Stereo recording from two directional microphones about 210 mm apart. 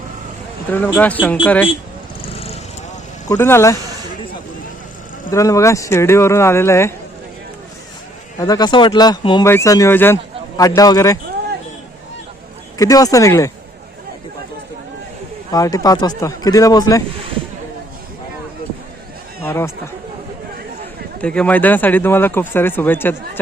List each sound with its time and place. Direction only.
0.7 s speech: 10° left (ahead or behind)
2.2 s vehicle: 30° left (ahead or behind)
3.2 s speech: 10° left (ahead or behind)
5.3 s speech: 15° left (ahead or behind)
8.4 s speech: 20° left (ahead or behind)
12.8 s speech: 15° left (ahead or behind)
15.5 s speech: 15° left (ahead or behind)
19.4 s speech: 10° left (ahead or behind)
21.2 s speech: 5° left (ahead or behind)